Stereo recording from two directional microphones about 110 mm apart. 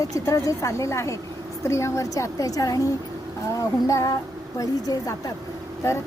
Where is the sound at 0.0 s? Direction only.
30° left (ahead or behind).